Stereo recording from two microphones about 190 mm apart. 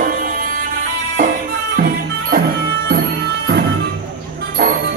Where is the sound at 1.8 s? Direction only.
50° right (ahead or behind).